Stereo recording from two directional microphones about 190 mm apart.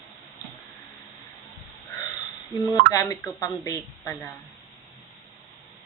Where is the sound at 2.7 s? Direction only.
20° left (ahead or behind).